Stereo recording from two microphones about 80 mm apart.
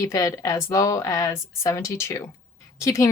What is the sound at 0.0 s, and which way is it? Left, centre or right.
Speech, left.